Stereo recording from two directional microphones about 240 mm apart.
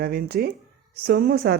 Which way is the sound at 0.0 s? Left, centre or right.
Right.